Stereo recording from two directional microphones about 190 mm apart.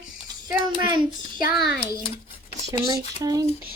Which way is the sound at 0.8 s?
25° right (ahead or behind).